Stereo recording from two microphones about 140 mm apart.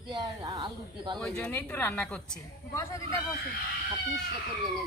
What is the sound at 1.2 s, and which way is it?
Speech, 5° left (ahead or behind).